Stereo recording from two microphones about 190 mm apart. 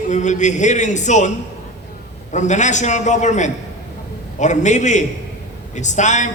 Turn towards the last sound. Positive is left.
turn(degrees=40)  # may be behind; listen again after turning